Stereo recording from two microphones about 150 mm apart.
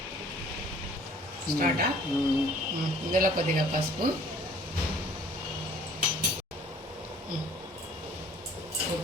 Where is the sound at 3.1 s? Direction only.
70° right (ahead or behind).